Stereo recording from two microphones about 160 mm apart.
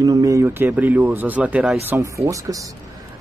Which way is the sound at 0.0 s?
20° right (ahead or behind).